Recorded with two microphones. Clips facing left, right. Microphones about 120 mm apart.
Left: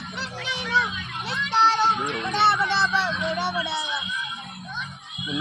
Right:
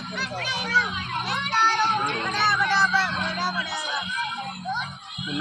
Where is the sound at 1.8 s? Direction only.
60° right (ahead or behind).